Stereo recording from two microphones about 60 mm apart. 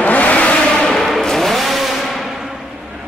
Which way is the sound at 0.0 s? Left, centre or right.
Left.